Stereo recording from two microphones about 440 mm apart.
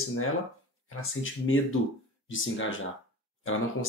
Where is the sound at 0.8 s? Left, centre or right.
Left.